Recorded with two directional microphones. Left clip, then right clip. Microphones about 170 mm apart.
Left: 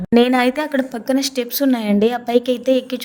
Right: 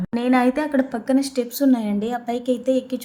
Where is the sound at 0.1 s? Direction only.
40° left (ahead or behind).